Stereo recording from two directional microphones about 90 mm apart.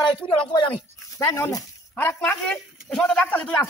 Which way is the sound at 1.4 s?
40° left (ahead or behind).